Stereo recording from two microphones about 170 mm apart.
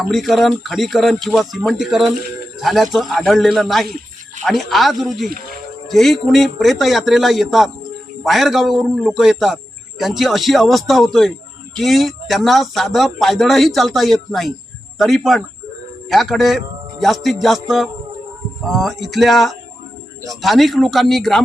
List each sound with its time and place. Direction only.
0.1 s a man's voice: centre (ahead or behind)